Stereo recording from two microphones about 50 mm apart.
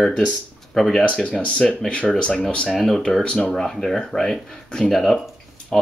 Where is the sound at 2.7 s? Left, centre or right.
Centre.